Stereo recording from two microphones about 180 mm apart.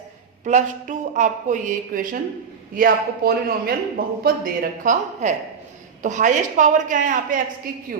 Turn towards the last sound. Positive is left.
turn(degrees=-50)  # may be behind; listen again after turning